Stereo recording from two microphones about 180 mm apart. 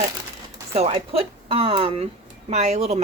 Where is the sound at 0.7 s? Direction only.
35° right (ahead or behind).